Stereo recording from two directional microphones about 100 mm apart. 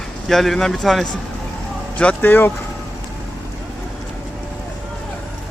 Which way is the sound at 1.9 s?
15° left (ahead or behind).